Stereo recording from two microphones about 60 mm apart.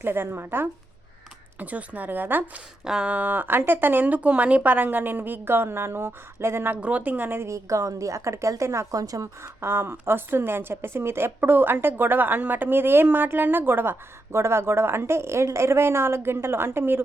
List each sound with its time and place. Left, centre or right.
0.0 s a woman's voice: right
1.5 s speech: right
2.8 s speech: centre
3.1 s a woman's voice: right
6.8 s speech: right
7.4 s a woman's voice: right
9.6 s a woman's voice: right
14.3 s a woman's voice: right